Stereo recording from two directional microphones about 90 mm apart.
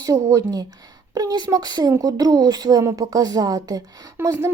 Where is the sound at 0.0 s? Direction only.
40° right (ahead or behind).